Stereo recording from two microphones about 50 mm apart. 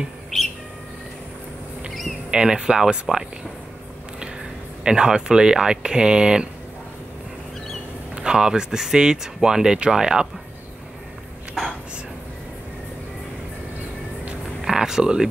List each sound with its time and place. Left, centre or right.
2.3 s speech: centre
4.8 s speech: centre
8.2 s speech: centre
11.6 s speech: centre
14.6 s a sound: centre